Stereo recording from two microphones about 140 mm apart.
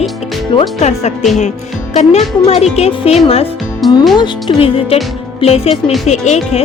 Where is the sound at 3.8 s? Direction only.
Centre (ahead or behind).